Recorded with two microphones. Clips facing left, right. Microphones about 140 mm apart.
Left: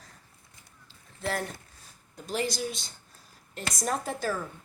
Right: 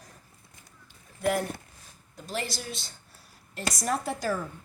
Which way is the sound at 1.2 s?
15° right (ahead or behind).